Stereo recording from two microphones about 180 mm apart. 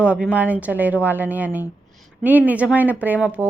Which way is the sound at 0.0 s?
5° right (ahead or behind).